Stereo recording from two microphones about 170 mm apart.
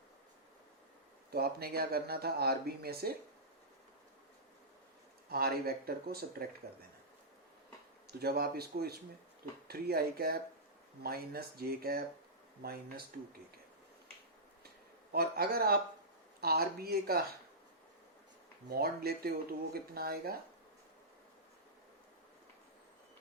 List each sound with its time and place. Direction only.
1.3 s speech: 65° right (ahead or behind)
5.3 s speech: 65° right (ahead or behind)
8.0 s speech: 65° right (ahead or behind)
15.1 s speech: 65° right (ahead or behind)
18.7 s speech: 65° right (ahead or behind)